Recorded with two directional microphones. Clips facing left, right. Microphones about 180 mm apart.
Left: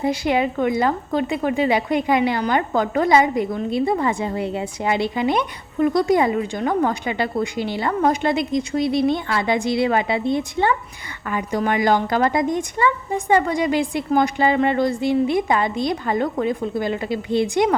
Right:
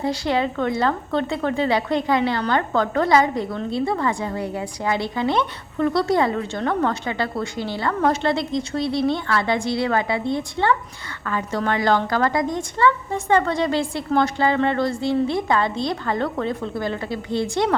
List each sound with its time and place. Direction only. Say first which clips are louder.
0.0 s a woman's voice: left 2 dB; 15° left (ahead or behind)